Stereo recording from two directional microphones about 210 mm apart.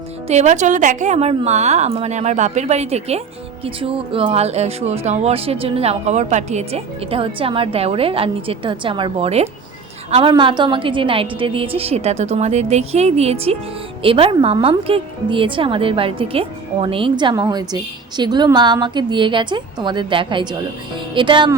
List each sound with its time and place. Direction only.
0.3 s a woman's voice: 35° right (ahead or behind)